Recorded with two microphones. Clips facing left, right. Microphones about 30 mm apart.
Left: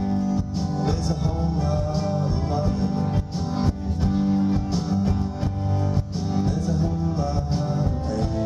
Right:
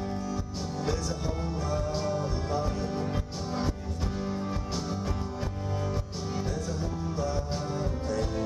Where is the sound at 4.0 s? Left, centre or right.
Left.